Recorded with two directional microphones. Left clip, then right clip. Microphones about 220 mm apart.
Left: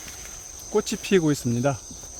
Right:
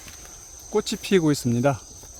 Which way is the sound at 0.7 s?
15° right (ahead or behind).